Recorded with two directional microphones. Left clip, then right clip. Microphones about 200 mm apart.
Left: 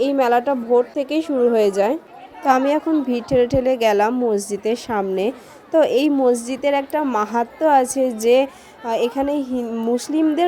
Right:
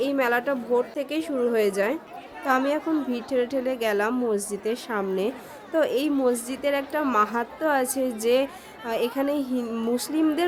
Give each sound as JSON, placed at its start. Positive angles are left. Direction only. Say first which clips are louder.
{"t": 0.0, "sound": "a woman's voice", "louder": "left 7 dB", "side_deg": 20}